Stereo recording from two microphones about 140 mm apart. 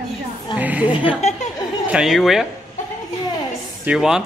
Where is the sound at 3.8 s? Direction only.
5° right (ahead or behind).